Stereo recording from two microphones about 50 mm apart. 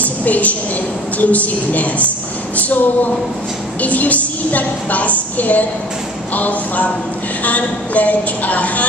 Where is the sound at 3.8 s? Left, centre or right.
Left.